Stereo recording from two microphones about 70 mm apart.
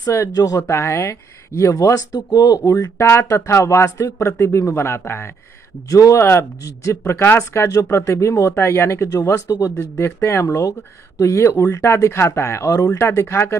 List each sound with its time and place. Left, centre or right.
0.0 s speech: left
0.3 s speech: left
5.9 s speech: left
9.9 s speech: left
10.4 s speech: left
13.0 s speech: left